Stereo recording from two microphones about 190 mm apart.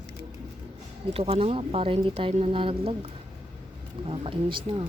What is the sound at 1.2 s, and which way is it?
Speech, 30° right (ahead or behind).